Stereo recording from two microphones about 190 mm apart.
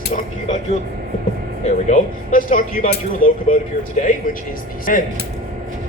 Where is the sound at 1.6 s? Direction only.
40° left (ahead or behind).